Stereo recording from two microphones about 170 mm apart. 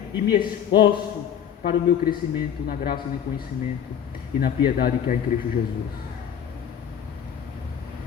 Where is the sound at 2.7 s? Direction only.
60° left (ahead or behind).